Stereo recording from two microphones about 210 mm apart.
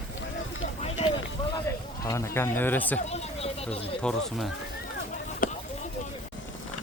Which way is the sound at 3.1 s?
30° left (ahead or behind).